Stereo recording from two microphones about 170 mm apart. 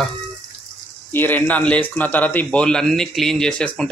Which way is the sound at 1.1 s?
10° left (ahead or behind).